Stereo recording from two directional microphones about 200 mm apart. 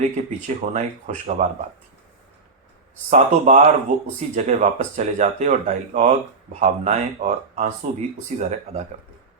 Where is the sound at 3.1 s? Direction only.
35° right (ahead or behind).